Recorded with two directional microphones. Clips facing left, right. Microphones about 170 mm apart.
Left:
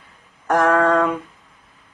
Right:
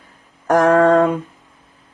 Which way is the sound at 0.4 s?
35° right (ahead or behind).